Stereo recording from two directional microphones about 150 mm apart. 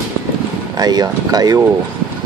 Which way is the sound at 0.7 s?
25° right (ahead or behind).